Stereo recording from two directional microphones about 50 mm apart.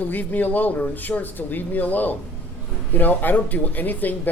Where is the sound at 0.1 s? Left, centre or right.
Left.